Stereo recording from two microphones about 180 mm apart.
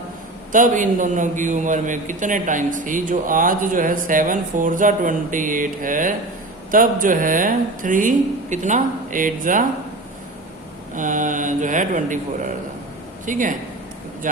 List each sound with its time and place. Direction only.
0.5 s a man's voice: 45° right (ahead or behind)
10.9 s a man's voice: 45° right (ahead or behind)